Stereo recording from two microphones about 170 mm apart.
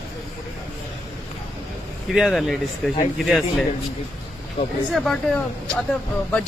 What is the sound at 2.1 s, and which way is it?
Speech, centre (ahead or behind).